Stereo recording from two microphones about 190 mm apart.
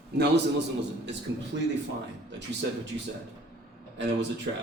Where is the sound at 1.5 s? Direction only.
75° right (ahead or behind).